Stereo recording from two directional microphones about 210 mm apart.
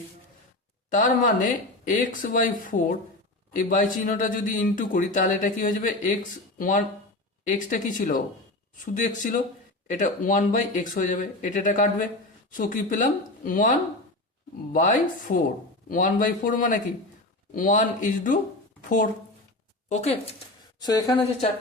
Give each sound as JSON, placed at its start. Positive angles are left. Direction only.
{"t": 0.9, "sound": "a man's voice", "side_deg": 35}
{"t": 19.9, "sound": "a man's voice", "side_deg": 30}
{"t": 20.7, "sound": "speech", "side_deg": 20}